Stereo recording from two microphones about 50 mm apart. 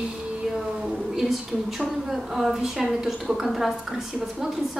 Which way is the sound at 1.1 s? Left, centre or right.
Centre.